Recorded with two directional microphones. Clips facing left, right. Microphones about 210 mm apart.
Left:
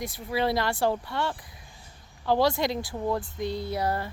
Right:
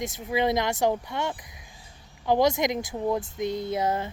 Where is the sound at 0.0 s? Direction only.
20° right (ahead or behind).